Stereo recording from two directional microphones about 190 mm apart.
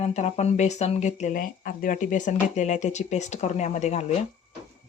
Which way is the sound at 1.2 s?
45° left (ahead or behind).